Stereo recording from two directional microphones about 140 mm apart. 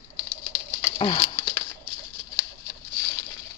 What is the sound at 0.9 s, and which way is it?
Patter, 40° left (ahead or behind).